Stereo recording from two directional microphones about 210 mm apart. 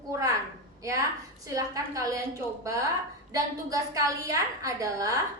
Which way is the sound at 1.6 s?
15° right (ahead or behind).